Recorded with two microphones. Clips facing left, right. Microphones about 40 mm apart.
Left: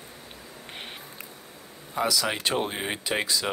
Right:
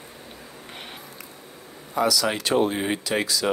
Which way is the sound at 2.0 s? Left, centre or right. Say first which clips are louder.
Right 3 dB; centre.